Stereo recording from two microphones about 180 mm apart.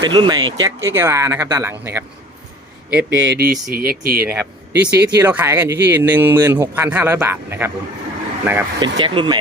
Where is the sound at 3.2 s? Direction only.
65° right (ahead or behind).